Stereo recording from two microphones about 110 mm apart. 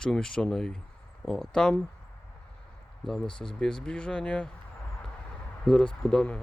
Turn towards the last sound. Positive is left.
turn(degrees=10)  # may be behind; listen again after turning